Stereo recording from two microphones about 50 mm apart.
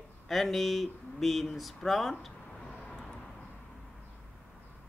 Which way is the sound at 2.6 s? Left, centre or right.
Centre.